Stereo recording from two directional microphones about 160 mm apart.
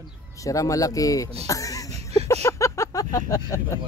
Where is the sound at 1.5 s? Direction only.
20° left (ahead or behind).